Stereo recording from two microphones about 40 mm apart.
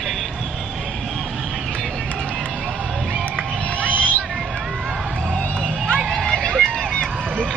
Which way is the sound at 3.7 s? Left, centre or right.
Left.